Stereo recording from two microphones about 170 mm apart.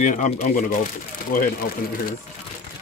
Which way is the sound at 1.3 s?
55° left (ahead or behind).